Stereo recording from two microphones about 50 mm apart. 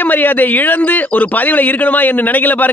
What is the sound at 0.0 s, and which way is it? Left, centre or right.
A man's voice, left.